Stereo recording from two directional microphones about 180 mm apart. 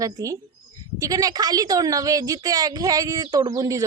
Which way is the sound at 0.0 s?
20° right (ahead or behind).